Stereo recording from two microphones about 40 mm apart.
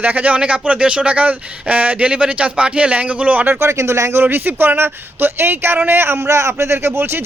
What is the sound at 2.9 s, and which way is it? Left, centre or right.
Speech, right.